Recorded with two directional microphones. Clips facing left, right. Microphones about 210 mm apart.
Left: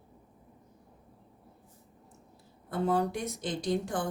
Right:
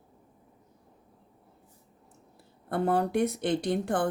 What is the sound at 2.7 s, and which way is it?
A woman's voice, 60° right (ahead or behind).